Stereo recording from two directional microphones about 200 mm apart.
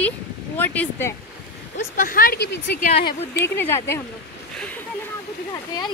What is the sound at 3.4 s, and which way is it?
Speech, 10° left (ahead or behind).